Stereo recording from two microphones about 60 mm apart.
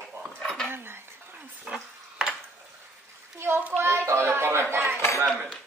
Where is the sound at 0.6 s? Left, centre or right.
Right.